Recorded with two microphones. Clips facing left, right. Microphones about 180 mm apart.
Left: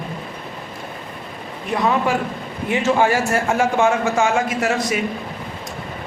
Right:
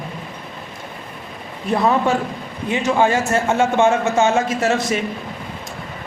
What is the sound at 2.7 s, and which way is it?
A man's voice, 20° right (ahead or behind).